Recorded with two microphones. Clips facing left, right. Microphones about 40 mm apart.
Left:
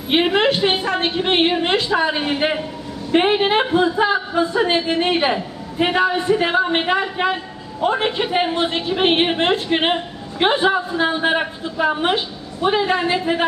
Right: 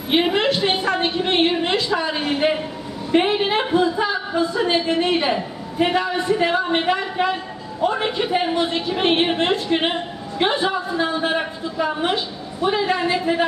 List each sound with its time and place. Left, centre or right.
0.1 s a woman's voice: left
1.0 s a woman's voice: left